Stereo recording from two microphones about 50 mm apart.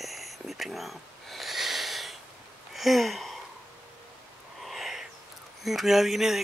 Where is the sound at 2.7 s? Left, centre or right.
Centre.